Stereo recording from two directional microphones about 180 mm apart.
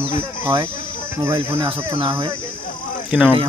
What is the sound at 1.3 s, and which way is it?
Speech, 25° right (ahead or behind).